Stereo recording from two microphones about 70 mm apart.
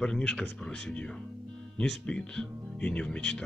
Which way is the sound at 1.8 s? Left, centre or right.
Centre.